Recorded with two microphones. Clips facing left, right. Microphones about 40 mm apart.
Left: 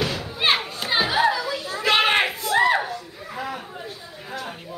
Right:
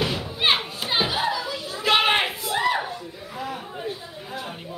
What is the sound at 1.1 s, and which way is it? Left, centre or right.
Children playing, left.